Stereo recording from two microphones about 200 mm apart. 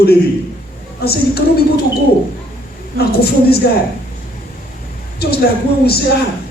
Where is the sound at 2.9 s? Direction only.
50° left (ahead or behind).